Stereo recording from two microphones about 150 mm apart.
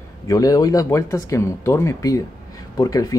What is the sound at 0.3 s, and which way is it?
Speech, 25° left (ahead or behind).